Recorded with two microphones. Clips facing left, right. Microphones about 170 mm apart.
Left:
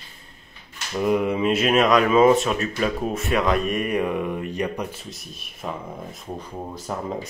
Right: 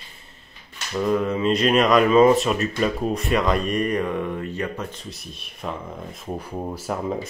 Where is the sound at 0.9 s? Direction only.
15° left (ahead or behind).